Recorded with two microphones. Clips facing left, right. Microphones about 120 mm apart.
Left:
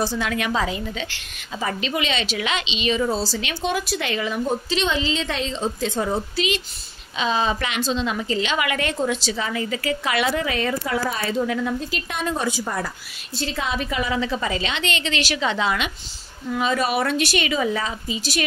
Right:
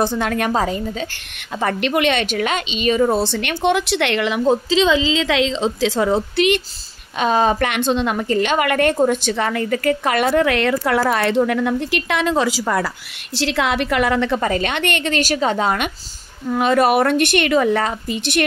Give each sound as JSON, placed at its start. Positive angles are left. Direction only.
{"t": 0.0, "sound": "a woman's voice", "side_deg": -50}
{"t": 1.6, "sound": "speech", "side_deg": -60}
{"t": 5.1, "sound": "a woman's voice", "side_deg": -90}
{"t": 7.2, "sound": "a woman's voice", "side_deg": -50}
{"t": 16.5, "sound": "speech", "side_deg": -55}